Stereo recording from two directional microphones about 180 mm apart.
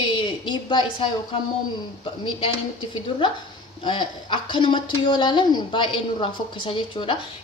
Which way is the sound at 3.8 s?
25° left (ahead or behind).